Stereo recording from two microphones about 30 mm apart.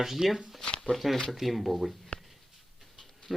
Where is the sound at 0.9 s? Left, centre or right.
Centre.